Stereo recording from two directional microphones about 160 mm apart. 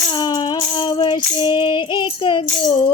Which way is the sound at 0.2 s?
25° left (ahead or behind).